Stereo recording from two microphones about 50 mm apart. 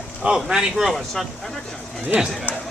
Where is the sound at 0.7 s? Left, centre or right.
Centre.